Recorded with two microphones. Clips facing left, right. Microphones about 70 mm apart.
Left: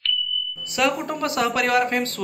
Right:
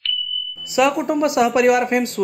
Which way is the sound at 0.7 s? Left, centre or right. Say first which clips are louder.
Right 6 dB; centre.